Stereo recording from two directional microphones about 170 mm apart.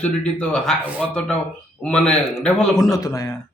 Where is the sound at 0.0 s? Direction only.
5° left (ahead or behind).